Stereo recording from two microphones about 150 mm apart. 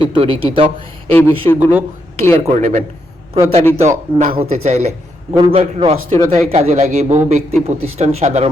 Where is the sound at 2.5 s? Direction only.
50° right (ahead or behind).